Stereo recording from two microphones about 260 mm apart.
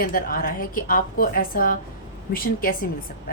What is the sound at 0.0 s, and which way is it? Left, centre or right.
A woman's voice, left.